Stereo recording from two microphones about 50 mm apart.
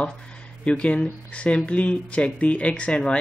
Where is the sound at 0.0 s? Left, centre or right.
Left.